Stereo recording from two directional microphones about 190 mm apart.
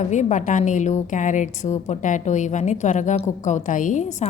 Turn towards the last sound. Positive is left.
turn(degrees=40)  # may be behind; listen again after turning